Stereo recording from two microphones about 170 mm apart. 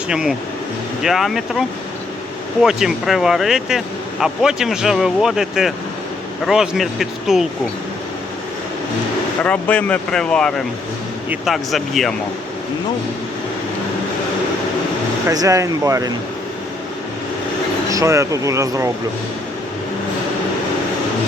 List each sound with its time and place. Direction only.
0.1 s speech: 5° right (ahead or behind)
9.4 s speech: 5° left (ahead or behind)
15.3 s speech: 20° right (ahead or behind)
17.9 s speech: 15° right (ahead or behind)